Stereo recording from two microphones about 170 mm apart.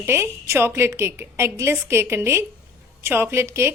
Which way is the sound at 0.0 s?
15° right (ahead or behind).